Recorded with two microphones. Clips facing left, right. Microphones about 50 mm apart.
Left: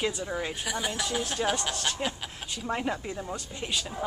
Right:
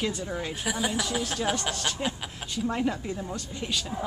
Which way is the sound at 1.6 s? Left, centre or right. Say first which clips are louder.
Right 1 dB; centre.